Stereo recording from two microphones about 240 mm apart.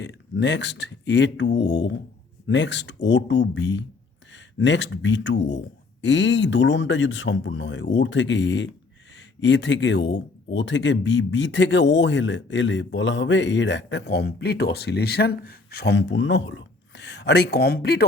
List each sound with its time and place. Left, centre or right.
0.0 s speech: left